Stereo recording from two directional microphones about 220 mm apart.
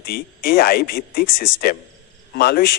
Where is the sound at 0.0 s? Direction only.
45° left (ahead or behind).